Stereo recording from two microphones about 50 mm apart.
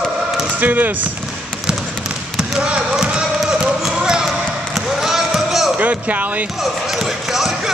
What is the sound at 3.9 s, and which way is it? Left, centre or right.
Basketball bounce, centre.